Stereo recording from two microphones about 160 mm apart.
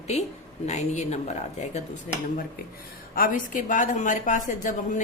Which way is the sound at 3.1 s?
60° left (ahead or behind).